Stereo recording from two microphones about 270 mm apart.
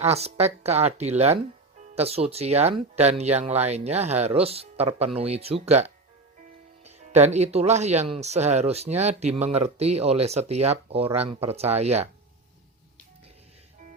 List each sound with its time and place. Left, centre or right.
0.0 s speech: right